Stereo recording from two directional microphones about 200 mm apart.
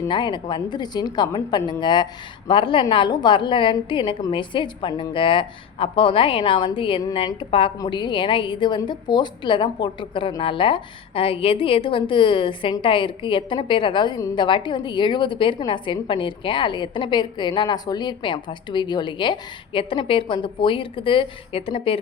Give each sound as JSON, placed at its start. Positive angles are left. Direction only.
{"t": 0.0, "sound": "a woman's voice", "side_deg": 25}